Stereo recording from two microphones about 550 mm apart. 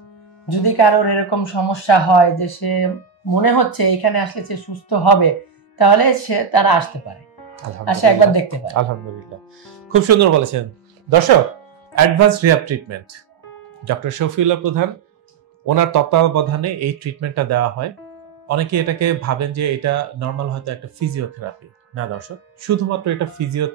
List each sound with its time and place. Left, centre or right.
0.5 s speech: left
9.8 s a man's voice: right
11.1 s speech: right
12.2 s a man's voice: right
22.6 s a man's voice: right